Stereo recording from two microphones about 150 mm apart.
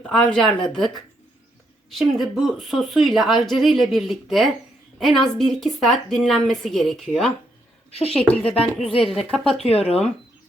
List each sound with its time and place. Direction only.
0.0 s a woman's voice: 5° left (ahead or behind)
7.9 s a woman's voice: 40° left (ahead or behind)
9.0 s a woman's voice: centre (ahead or behind)
9.6 s speech: 40° left (ahead or behind)